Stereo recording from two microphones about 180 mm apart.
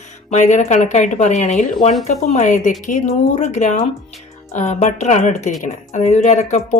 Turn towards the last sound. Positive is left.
turn(degrees=40)  # may be behind; listen again after turning